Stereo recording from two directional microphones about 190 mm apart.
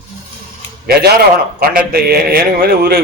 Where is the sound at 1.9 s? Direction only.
55° right (ahead or behind).